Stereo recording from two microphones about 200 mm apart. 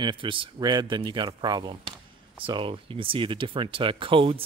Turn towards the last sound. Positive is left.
turn(degrees=-25)  # may be behind; listen again after turning